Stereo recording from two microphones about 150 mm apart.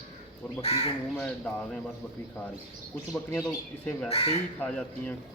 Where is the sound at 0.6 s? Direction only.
40° left (ahead or behind).